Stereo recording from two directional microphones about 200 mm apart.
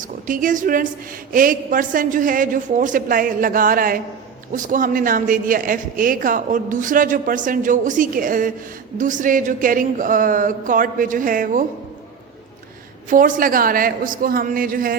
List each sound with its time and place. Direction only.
0.0 s a woman's voice: 40° right (ahead or behind)
13.1 s a woman's voice: 40° right (ahead or behind)